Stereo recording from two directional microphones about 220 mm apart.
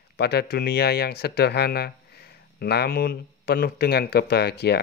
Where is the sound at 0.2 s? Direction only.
45° left (ahead or behind).